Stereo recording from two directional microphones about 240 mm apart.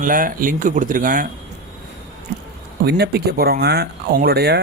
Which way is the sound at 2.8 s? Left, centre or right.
Right.